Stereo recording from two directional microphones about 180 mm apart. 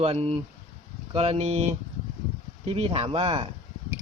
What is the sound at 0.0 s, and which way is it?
A man's voice, 35° right (ahead or behind).